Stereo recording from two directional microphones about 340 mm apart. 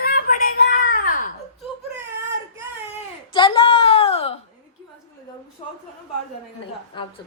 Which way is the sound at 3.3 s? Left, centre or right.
Centre.